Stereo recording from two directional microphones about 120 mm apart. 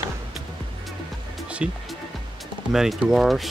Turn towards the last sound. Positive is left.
turn(degrees=0)  # may be behind; listen again after turning